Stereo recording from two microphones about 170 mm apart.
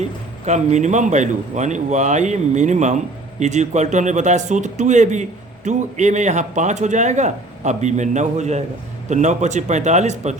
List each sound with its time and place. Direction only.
0.0 s speech: 45° right (ahead or behind)